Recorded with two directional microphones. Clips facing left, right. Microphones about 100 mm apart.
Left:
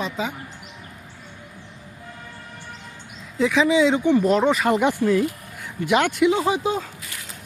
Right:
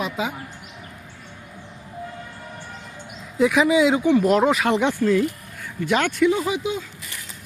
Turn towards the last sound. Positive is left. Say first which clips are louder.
# left 3 dB
turn(degrees=40)  # may be behind; listen again after turning